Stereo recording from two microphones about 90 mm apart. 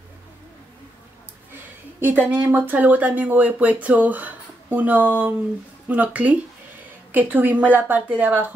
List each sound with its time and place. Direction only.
2.0 s a woman's voice: 20° right (ahead or behind)